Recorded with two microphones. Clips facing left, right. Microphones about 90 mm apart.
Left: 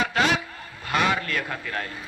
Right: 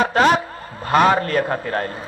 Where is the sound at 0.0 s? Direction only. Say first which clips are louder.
Right 7 dB; 40° right (ahead or behind).